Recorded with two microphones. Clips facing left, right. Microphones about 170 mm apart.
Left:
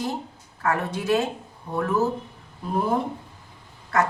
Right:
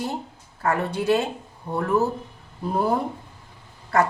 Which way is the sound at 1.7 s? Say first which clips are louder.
Right 1 dB; 30° right (ahead or behind).